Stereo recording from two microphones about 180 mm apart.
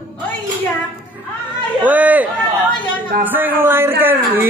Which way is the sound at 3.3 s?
10° right (ahead or behind).